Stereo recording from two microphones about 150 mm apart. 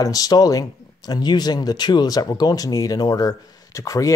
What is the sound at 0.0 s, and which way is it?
Speech, 25° left (ahead or behind).